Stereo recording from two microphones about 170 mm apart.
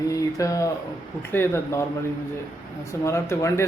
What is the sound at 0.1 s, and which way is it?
Speech, 20° left (ahead or behind).